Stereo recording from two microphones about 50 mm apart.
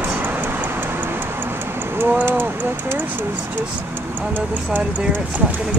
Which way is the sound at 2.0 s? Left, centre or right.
Right.